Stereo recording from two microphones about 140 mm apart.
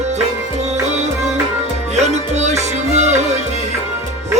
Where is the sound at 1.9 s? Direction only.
55° right (ahead or behind).